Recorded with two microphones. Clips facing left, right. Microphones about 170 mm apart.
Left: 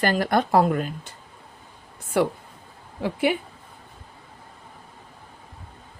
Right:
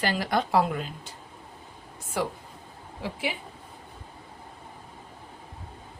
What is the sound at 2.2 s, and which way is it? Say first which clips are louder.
Speech: left 8 dB; 60° left (ahead or behind).